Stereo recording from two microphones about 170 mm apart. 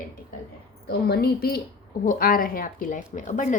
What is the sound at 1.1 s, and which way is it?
A woman's voice, 65° left (ahead or behind).